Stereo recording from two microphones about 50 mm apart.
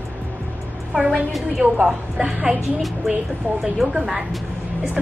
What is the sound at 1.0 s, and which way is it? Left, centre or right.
Speech, right.